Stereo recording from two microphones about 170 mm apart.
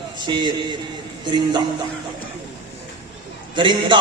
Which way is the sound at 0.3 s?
25° right (ahead or behind).